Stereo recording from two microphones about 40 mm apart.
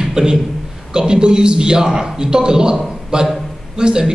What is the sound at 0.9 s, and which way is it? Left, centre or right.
A man's voice, centre.